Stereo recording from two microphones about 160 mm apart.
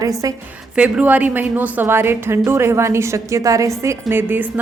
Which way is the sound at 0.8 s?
10° right (ahead or behind).